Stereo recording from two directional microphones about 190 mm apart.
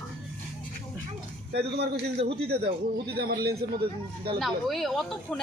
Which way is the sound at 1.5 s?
60° right (ahead or behind).